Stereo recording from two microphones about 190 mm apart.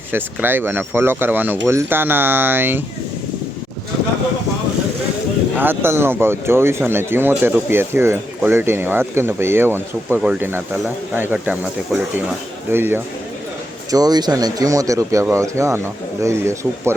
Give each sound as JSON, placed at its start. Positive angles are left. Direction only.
{"t": 0.1, "sound": "speech", "side_deg": -10}
{"t": 5.5, "sound": "speech", "side_deg": -10}